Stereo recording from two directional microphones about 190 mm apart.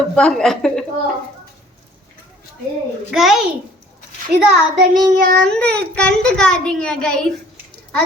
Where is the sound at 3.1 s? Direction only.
Centre (ahead or behind).